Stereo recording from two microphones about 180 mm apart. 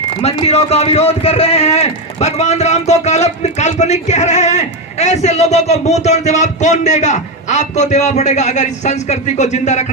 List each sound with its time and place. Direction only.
0.2 s speech: 35° left (ahead or behind)